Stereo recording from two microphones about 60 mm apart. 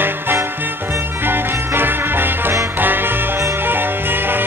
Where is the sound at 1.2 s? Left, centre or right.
Right.